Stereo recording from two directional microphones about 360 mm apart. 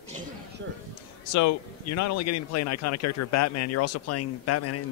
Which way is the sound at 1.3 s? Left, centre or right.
Left.